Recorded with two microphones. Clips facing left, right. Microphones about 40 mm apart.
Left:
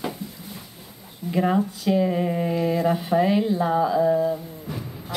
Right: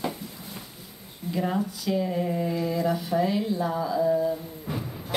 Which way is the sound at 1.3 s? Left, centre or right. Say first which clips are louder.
Left 6 dB; left.